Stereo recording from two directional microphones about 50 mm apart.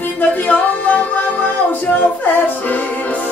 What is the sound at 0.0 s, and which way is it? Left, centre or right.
Music, left.